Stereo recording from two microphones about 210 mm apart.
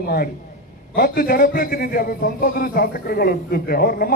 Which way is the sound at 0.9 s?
45° left (ahead or behind).